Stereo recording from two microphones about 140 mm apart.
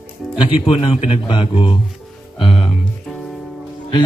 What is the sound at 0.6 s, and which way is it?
A man's voice, 40° left (ahead or behind).